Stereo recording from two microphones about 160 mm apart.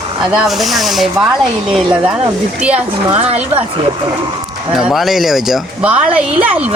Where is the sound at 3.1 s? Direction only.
40° right (ahead or behind).